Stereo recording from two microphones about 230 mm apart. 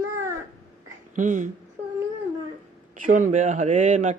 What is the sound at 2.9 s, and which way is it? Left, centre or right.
Speech, right.